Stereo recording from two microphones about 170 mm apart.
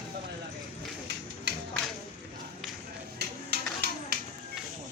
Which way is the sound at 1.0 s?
85° right.